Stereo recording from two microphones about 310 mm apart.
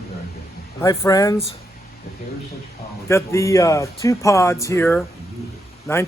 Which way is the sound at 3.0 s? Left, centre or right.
Centre.